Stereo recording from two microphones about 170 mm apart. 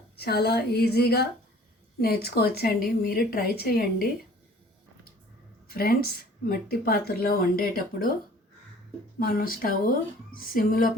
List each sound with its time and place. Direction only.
0.2 s a woman's voice: 70° left (ahead or behind)
5.6 s speech: 60° left (ahead or behind)
9.1 s speech: 60° left (ahead or behind)